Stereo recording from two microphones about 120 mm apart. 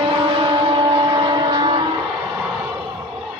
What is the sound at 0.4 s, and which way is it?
Vehicle, 35° right (ahead or behind).